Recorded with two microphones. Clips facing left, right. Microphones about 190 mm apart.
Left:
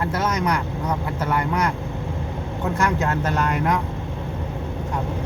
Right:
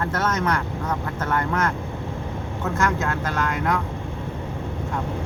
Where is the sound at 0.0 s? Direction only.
10° left (ahead or behind).